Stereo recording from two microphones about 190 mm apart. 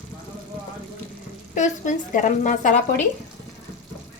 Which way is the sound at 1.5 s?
40° left (ahead or behind).